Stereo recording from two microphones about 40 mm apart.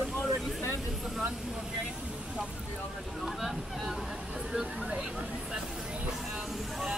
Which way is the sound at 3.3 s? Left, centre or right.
Centre.